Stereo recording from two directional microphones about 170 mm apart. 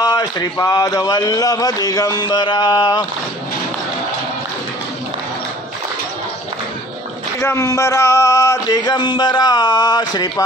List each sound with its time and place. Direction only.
0.0 s a man's voice: 20° left (ahead or behind)
7.3 s a man's voice: 15° left (ahead or behind)